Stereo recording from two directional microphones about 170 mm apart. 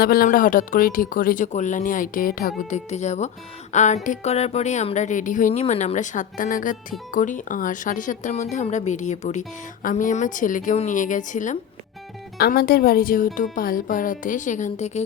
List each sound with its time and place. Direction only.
0.0 s speech: 60° left (ahead or behind)
12.4 s speech: 65° left (ahead or behind); by 15.0 s 40° left (ahead or behind)